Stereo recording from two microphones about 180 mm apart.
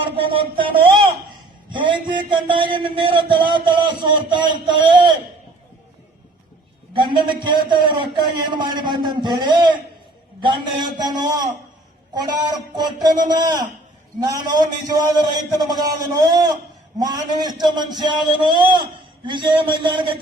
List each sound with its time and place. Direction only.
0.2 s a man's voice: 30° right (ahead or behind)
6.9 s a man's voice: 25° right (ahead or behind)